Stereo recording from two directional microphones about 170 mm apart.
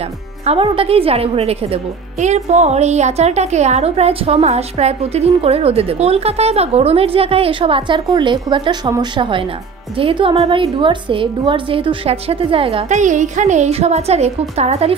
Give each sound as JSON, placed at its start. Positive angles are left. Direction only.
{"t": 0.5, "sound": "a woman's voice", "side_deg": -35}